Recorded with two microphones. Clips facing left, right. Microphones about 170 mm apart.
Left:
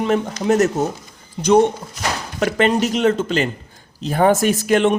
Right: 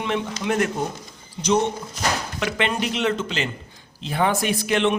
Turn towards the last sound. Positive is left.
turn(degrees=45)  # may be behind; listen again after turning